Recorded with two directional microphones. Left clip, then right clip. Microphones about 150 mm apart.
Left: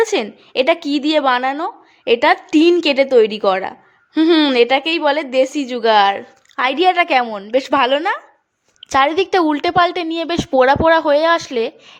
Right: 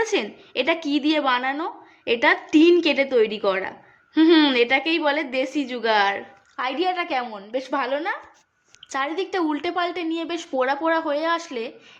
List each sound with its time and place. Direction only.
0.0 s a woman's voice: 40° left (ahead or behind)
6.6 s a woman's voice: 55° left (ahead or behind)